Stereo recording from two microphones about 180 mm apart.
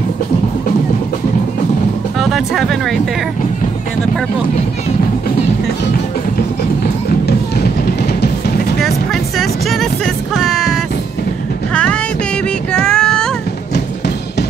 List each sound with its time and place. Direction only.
2.1 s speech: centre (ahead or behind)
7.8 s music: 60° left (ahead or behind)
8.8 s music: centre (ahead or behind)
12.8 s child singing: 5° left (ahead or behind)